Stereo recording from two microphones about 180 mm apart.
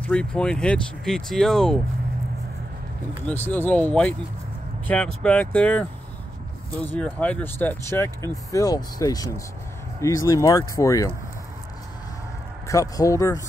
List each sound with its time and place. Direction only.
0.0 s speech: 5° left (ahead or behind)
3.3 s speech: 10° left (ahead or behind)
12.6 s speech: 20° left (ahead or behind)